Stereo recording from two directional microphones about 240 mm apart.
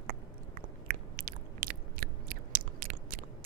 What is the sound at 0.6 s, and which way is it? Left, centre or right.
Chewing, right.